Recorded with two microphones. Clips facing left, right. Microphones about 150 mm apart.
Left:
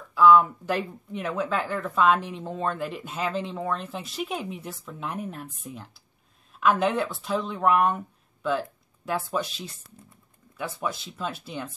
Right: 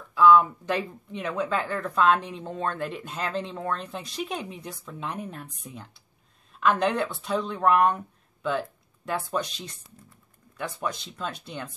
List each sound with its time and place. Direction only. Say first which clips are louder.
0.1 s speech: even; centre (ahead or behind)